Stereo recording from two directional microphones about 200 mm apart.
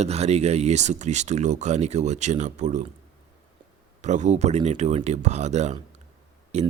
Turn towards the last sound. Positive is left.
turn(degrees=-35)  # may be behind; listen again after turning